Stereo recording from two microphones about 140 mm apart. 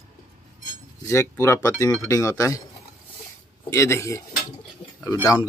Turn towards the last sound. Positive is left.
turn(degrees=25)  # may be behind; listen again after turning